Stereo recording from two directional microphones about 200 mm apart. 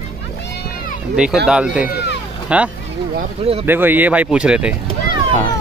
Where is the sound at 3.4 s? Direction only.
30° right (ahead or behind).